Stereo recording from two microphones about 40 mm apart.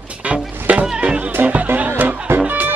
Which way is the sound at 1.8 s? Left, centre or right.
Right.